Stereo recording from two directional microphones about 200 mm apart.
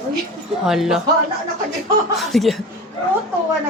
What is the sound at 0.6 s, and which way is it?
Speech, centre (ahead or behind).